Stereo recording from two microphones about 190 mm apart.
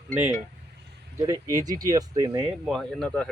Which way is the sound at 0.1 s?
10° right (ahead or behind).